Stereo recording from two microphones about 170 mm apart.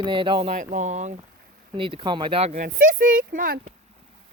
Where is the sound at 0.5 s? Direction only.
45° right (ahead or behind).